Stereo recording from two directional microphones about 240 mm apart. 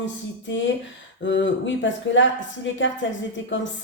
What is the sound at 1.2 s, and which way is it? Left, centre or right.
Speech, left.